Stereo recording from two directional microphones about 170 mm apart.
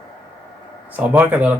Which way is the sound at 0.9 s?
10° right (ahead or behind).